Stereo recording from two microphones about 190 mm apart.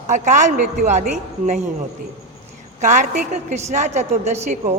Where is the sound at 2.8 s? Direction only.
40° right (ahead or behind).